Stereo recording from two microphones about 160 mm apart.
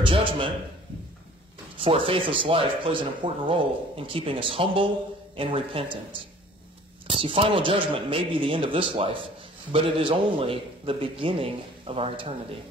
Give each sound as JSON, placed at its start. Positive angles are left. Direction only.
{"t": 0.0, "sound": "a man's voice", "side_deg": -30}
{"t": 1.8, "sound": "a man's voice", "side_deg": -35}
{"t": 7.1, "sound": "a man's voice", "side_deg": -35}